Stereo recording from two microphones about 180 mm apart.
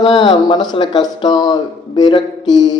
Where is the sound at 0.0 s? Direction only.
25° left (ahead or behind).